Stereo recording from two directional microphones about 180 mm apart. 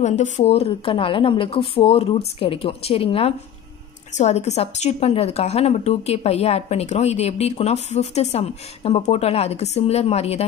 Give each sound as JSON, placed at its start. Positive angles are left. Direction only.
{"t": 0.0, "sound": "a woman's voice", "side_deg": 40}